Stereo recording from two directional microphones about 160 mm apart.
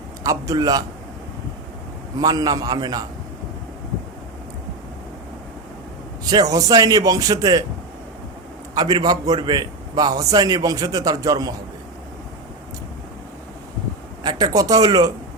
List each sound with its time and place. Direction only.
0.2 s a man's voice: 20° right (ahead or behind)
2.1 s a man's voice: 25° right (ahead or behind)
6.2 s a man's voice: 25° right (ahead or behind)
8.7 s a man's voice: 25° right (ahead or behind)
14.3 s a man's voice: 25° right (ahead or behind)